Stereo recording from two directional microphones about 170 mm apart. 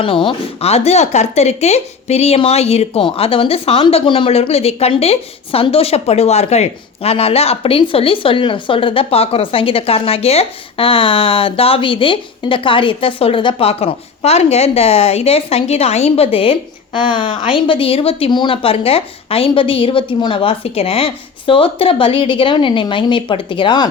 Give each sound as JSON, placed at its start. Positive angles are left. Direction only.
{"t": 0.0, "sound": "speech", "side_deg": 30}